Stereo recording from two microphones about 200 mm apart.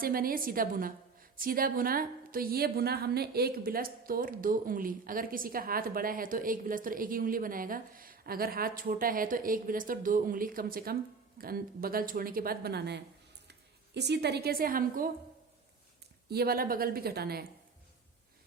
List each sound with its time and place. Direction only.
0.0 s a woman's voice: 45° right (ahead or behind)
16.3 s a woman's voice: 50° right (ahead or behind)